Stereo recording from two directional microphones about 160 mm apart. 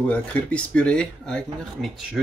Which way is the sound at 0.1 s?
10° left (ahead or behind).